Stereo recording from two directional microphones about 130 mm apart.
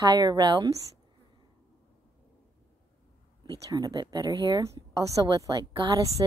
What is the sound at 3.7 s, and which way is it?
A woman's voice, 30° right (ahead or behind).